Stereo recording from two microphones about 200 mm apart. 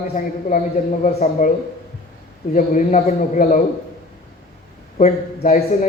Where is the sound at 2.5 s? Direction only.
40° left (ahead or behind).